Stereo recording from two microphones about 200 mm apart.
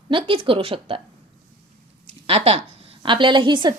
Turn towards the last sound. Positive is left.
turn(degrees=-25)  # may be behind; listen again after turning